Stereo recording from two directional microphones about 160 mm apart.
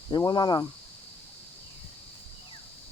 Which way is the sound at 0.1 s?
25° left (ahead or behind).